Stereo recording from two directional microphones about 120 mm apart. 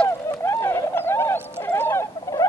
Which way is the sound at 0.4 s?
20° left (ahead or behind).